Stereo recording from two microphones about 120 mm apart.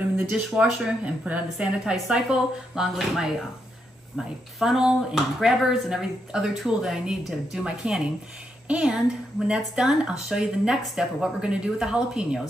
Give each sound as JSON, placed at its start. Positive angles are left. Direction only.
{"t": 0.5, "sound": "speech", "side_deg": -5}
{"t": 4.6, "sound": "speech", "side_deg": -5}